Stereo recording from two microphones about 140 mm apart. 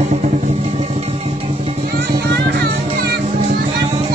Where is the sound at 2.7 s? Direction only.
75° right (ahead or behind); by 4.1 s 60° right (ahead or behind).